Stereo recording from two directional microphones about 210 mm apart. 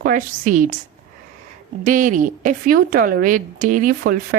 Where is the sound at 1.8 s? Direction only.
40° right (ahead or behind).